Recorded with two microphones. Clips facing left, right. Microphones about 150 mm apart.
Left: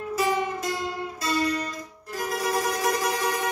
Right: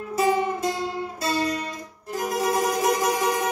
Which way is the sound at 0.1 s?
25° right (ahead or behind).